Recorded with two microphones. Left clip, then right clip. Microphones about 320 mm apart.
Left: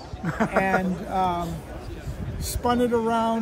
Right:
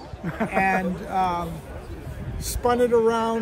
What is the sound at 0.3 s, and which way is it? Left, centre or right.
Speech, left.